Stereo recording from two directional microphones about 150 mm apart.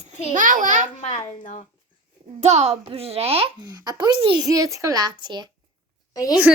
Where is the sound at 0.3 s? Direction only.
60° right (ahead or behind).